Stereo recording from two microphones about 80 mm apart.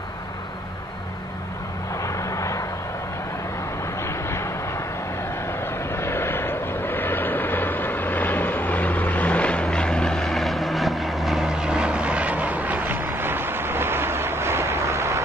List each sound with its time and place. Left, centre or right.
2.0 s vehicle: left
4.0 s vehicle: left
5.9 s vehicle: left; by 15.2 s right